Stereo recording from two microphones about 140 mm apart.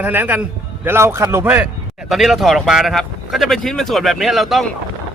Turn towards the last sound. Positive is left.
turn(degrees=0)  # may be behind; listen again after turning